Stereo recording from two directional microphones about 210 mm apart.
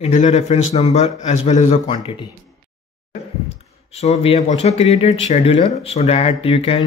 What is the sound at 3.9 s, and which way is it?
A man's voice, 30° left (ahead or behind).